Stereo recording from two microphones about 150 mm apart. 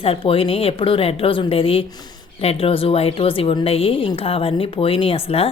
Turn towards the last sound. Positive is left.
turn(degrees=40)  # may be behind; listen again after turning